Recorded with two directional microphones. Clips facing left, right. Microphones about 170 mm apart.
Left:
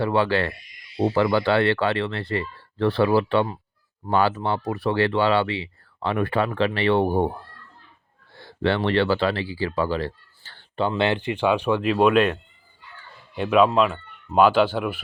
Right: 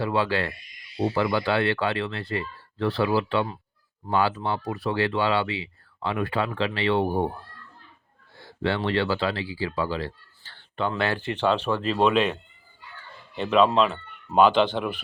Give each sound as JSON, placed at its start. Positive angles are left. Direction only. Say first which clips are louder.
{"t": 0.0, "sound": "speech", "louder": "left 3 dB", "side_deg": 60}
{"t": 8.4, "sound": "speech", "louder": "left 4 dB", "side_deg": 65}
{"t": 10.4, "sound": "a sound", "louder": "left 5 dB", "side_deg": 45}
{"t": 10.8, "sound": "speech", "louder": "left 3 dB", "side_deg": 25}